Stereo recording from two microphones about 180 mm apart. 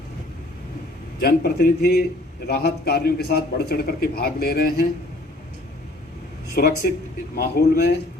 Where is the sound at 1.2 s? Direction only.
60° left (ahead or behind).